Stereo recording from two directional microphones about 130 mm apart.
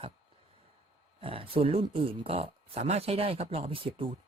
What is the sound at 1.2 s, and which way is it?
Speech, 45° right (ahead or behind).